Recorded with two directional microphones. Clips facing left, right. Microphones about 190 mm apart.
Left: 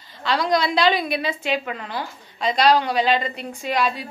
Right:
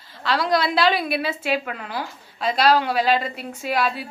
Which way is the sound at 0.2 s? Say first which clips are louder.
Even; 5° right (ahead or behind).